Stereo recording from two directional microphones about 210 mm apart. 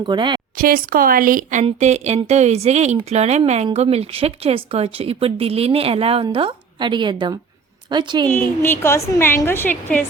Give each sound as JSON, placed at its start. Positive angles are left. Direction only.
{"t": 0.0, "sound": "speech", "side_deg": -20}
{"t": 0.5, "sound": "speech", "side_deg": -45}
{"t": 8.3, "sound": "a woman's voice", "side_deg": 10}